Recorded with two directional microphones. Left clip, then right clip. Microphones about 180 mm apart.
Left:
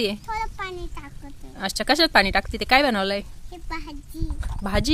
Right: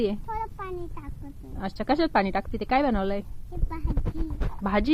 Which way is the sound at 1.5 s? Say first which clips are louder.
Left 5 dB; 15° left (ahead or behind).